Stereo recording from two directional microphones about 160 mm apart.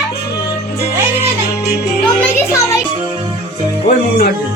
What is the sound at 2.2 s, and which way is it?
Music, 15° left (ahead or behind).